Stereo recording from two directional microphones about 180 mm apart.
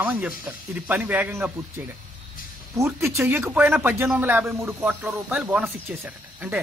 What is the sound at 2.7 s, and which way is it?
A man's voice, 15° right (ahead or behind).